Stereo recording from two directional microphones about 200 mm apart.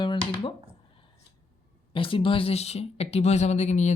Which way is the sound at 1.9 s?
25° left (ahead or behind).